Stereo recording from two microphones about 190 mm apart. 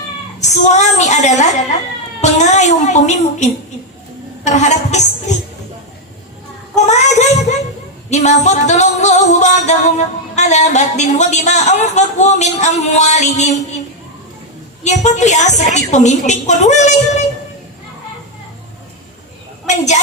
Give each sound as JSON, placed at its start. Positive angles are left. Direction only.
{"t": 0.4, "sound": "a woman's voice", "side_deg": 40}
{"t": 2.2, "sound": "music", "side_deg": 40}
{"t": 6.7, "sound": "child singing", "side_deg": 40}
{"t": 8.1, "sound": "music", "side_deg": 40}
{"t": 14.8, "sound": "music", "side_deg": 40}
{"t": 19.6, "sound": "a sound", "side_deg": 40}